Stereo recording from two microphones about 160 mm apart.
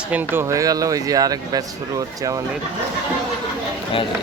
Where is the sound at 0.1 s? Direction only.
10° right (ahead or behind).